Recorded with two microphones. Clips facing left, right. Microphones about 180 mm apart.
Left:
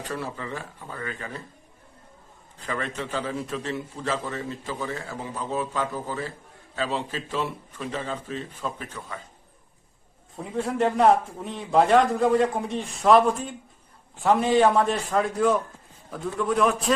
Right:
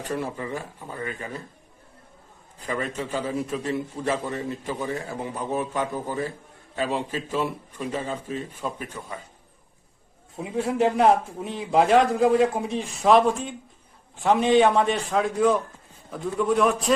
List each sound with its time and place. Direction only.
0.1 s a man's voice: 15° right (ahead or behind)
2.6 s a man's voice: 10° right (ahead or behind)
10.3 s a man's voice: 5° right (ahead or behind)